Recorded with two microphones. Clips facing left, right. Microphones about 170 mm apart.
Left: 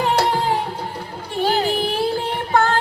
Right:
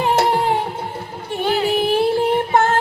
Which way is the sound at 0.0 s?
25° right (ahead or behind).